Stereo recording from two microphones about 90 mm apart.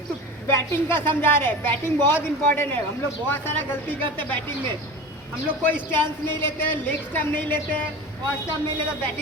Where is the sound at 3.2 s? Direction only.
25° left (ahead or behind).